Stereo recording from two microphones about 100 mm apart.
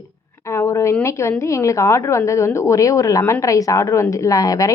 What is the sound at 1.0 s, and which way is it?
A woman's voice, 30° left (ahead or behind).